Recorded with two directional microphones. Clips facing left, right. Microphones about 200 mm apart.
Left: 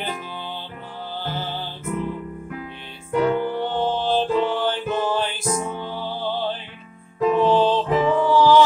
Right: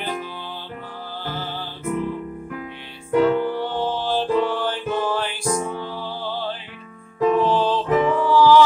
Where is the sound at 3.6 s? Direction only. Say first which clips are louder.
Left 1 dB; 20° left (ahead or behind).